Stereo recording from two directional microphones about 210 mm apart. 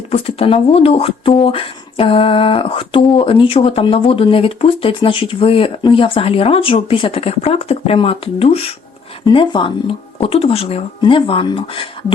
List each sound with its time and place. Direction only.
0.1 s speech: 25° left (ahead or behind)